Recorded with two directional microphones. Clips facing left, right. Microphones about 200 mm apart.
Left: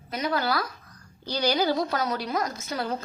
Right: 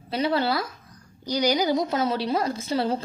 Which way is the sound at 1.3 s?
15° right (ahead or behind).